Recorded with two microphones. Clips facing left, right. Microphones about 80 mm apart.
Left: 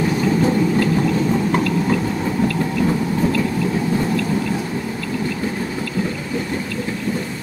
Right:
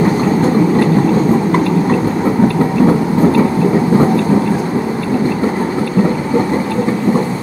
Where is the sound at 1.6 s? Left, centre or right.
Right.